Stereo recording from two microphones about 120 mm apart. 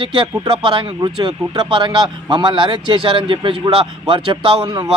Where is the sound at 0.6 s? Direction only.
40° right (ahead or behind).